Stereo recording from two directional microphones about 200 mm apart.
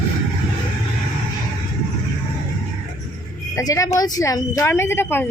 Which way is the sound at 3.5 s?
15° left (ahead or behind).